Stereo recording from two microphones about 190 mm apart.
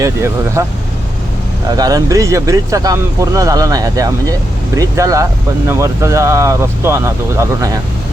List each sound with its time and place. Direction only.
0.0 s speech: 15° right (ahead or behind)
1.7 s speech: 20° right (ahead or behind)